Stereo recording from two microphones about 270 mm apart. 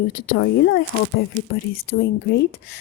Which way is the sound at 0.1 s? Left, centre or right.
Left.